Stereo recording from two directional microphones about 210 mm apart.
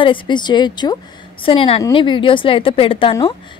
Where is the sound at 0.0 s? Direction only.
25° left (ahead or behind).